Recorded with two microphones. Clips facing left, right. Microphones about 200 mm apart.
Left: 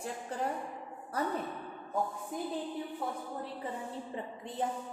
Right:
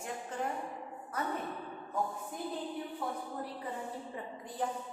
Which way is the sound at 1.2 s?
35° left (ahead or behind).